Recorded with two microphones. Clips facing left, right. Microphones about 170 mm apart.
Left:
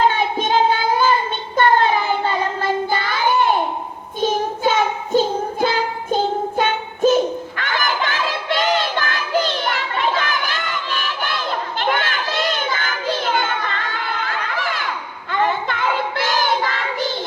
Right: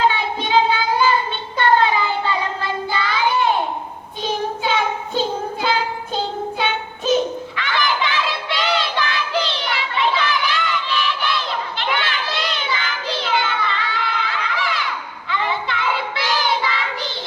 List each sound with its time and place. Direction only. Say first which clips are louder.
0.1 s child singing: left 1 dB; 45° left (ahead or behind)